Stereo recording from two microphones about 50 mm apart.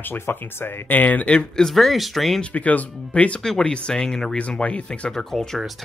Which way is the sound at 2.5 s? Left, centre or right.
Left.